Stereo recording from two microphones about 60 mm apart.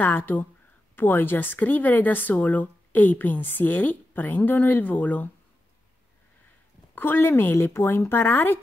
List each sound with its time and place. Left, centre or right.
0.0 s a woman's voice: left
7.0 s a woman's voice: left